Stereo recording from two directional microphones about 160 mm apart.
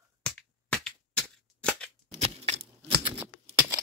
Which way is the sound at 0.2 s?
5° left (ahead or behind).